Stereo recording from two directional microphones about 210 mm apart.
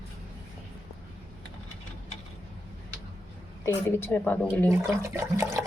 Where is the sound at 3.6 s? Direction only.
10° left (ahead or behind).